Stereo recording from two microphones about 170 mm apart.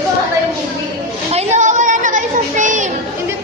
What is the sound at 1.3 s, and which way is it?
Chatter, 45° right (ahead or behind).